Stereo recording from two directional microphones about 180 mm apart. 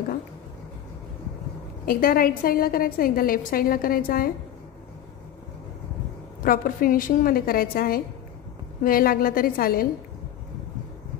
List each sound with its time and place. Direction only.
1.9 s a woman's voice: 55° left (ahead or behind)
6.4 s a woman's voice: 50° left (ahead or behind)